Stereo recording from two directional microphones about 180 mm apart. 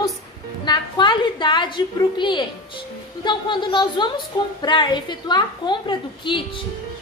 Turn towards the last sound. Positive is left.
turn(degrees=25)  # may be behind; listen again after turning